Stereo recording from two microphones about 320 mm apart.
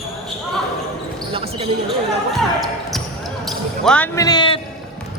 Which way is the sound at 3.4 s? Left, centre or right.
Centre.